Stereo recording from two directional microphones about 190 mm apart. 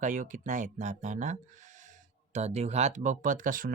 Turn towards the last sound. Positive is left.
turn(degrees=-45)  # may be behind; listen again after turning